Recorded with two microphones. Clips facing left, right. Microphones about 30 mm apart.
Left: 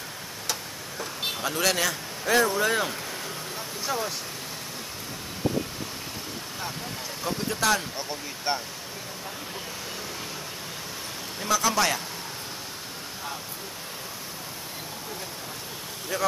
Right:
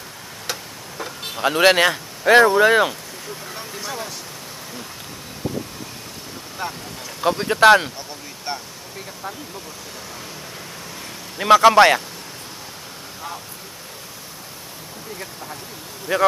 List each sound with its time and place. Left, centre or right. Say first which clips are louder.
0.5 s vehicle: right 3 dB; centre
1.4 s speech: right 12 dB; right
3.8 s speech: left 2 dB; centre
7.2 s a man's voice: right 12 dB; right
8.5 s speech: left 1 dB; centre
11.3 s a man's voice: right 13 dB; right
16.1 s speech: right 10 dB; right